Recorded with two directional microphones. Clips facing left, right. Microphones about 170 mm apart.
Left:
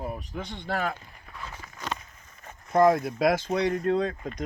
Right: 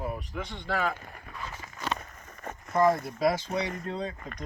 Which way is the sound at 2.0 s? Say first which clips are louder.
Right 8 dB; 60° right (ahead or behind).